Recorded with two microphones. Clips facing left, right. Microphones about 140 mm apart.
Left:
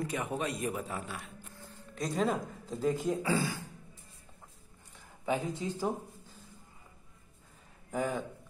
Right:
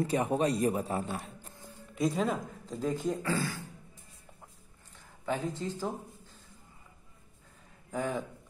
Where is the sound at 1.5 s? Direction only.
15° right (ahead or behind).